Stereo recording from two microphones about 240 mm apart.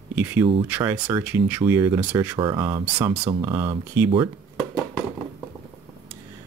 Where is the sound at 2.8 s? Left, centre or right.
Centre.